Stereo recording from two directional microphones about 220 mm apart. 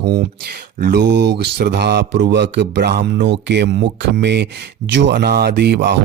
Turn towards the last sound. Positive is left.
turn(degrees=-50)  # may be behind; listen again after turning